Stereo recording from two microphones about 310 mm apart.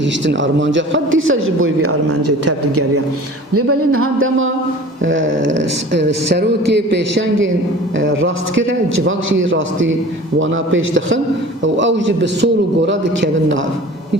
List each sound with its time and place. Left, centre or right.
0.0 s a man's voice: right